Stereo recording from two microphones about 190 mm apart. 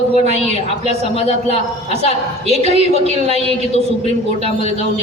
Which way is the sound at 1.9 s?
35° left (ahead or behind).